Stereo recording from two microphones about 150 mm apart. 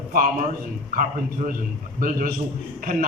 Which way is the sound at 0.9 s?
70° right (ahead or behind).